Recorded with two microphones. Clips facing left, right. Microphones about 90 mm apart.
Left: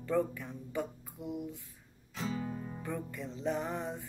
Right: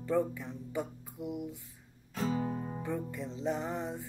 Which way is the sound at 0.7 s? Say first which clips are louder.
Even; 20° right (ahead or behind).